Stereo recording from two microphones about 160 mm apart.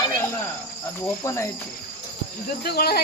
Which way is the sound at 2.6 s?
75° left (ahead or behind).